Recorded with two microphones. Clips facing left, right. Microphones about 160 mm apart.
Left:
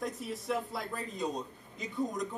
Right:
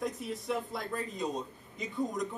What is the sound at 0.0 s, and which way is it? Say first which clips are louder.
Speech: right 1 dB; centre (ahead or behind).